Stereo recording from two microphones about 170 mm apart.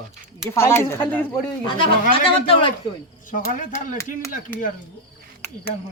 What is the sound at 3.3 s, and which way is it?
Speech, 50° left (ahead or behind).